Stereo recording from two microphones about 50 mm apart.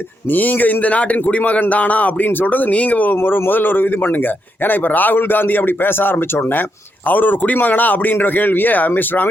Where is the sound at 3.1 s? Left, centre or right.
Left.